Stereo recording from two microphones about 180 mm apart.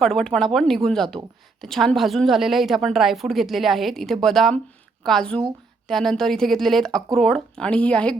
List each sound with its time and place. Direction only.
0.0 s a woman's voice: 5° left (ahead or behind)